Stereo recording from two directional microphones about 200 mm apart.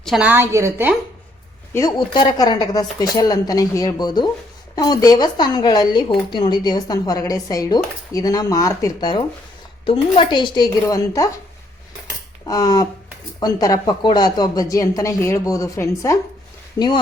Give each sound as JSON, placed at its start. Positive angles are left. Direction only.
{"t": 0.0, "sound": "a woman's voice", "side_deg": -5}
{"t": 1.7, "sound": "speech", "side_deg": 20}
{"t": 12.5, "sound": "speech", "side_deg": 20}